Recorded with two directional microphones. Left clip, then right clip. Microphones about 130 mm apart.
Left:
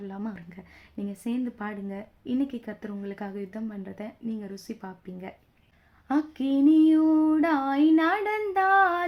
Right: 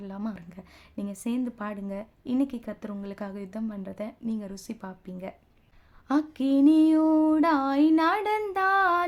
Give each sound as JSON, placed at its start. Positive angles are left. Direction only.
{"t": 0.0, "sound": "speech", "side_deg": -25}